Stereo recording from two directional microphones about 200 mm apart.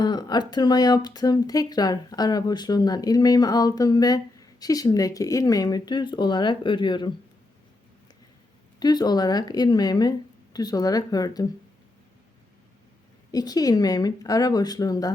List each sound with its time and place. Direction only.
0.0 s speech: 20° left (ahead or behind)
8.8 s speech: 20° left (ahead or behind)
13.3 s speech: 20° left (ahead or behind)